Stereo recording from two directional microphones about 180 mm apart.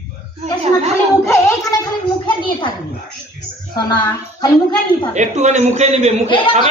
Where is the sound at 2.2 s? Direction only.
25° left (ahead or behind).